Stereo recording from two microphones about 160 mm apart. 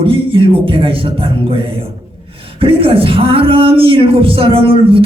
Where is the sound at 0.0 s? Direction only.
35° right (ahead or behind).